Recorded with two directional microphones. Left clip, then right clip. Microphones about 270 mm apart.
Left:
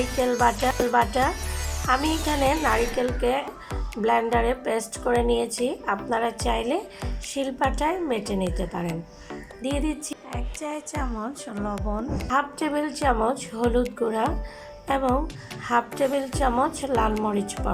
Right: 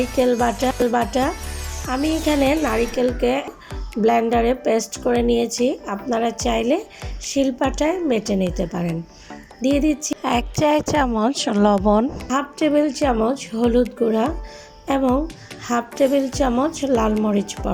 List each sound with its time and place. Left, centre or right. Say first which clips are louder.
0.2 s speech: right 3 dB; centre
10.2 s speech: right 17 dB; right
12.3 s speech: right 4 dB; centre